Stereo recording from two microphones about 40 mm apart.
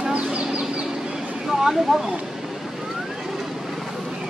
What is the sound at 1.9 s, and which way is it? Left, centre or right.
Speech, centre.